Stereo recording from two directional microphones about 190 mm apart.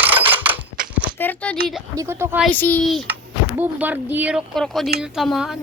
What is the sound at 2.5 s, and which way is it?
Speech, 10° left (ahead or behind).